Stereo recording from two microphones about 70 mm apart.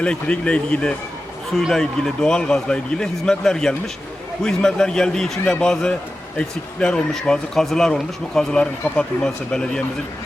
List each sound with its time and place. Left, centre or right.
0.0 s speech: centre